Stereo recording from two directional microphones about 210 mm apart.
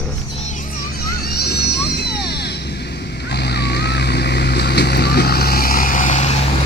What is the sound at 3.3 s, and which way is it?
Vehicle, 50° left (ahead or behind).